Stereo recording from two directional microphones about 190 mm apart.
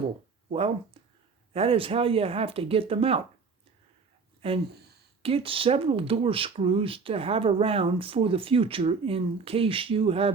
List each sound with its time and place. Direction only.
1.5 s speech: 30° right (ahead or behind)
4.4 s a sound: 30° right (ahead or behind)
5.2 s speech: 30° right (ahead or behind)